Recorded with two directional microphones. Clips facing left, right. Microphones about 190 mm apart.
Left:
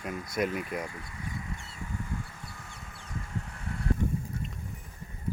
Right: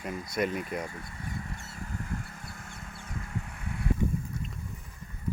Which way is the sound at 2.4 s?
50° right (ahead or behind).